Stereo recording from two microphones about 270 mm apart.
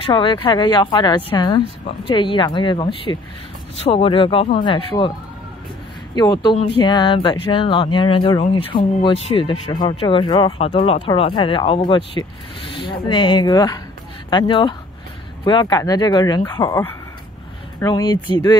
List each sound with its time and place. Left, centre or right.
0.0 s speech: centre
6.1 s speech: centre